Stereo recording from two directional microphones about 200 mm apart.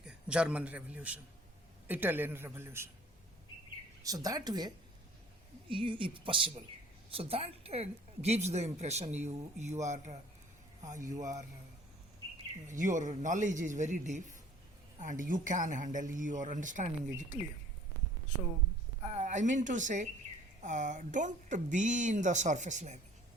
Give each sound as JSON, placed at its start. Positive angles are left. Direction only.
{"t": 0.0, "sound": "a man's voice", "side_deg": -5}
{"t": 4.0, "sound": "a woman's voice", "side_deg": -20}
{"t": 11.2, "sound": "a man's voice", "side_deg": -15}
{"t": 12.6, "sound": "a woman's voice", "side_deg": -40}
{"t": 19.0, "sound": "a woman's voice", "side_deg": -35}